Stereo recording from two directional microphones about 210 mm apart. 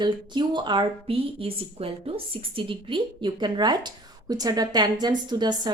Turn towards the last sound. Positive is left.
turn(degrees=-20)  # may be behind; listen again after turning